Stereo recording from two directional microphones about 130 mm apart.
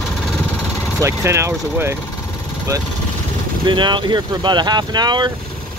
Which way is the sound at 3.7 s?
35° right (ahead or behind).